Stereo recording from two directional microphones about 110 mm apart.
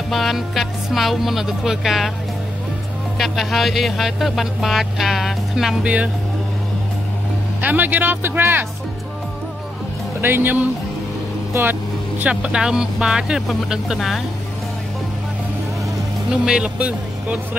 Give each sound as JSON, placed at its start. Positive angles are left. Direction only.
{"t": 0.1, "sound": "music", "side_deg": 0}
{"t": 3.2, "sound": "music", "side_deg": 0}
{"t": 7.6, "sound": "speech", "side_deg": -15}
{"t": 10.2, "sound": "speech", "side_deg": -20}
{"t": 12.2, "sound": "music", "side_deg": -10}
{"t": 16.3, "sound": "speech", "side_deg": -5}